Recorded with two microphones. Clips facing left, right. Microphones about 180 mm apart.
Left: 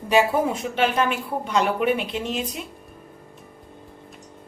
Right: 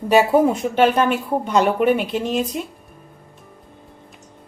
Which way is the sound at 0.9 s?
50° right (ahead or behind).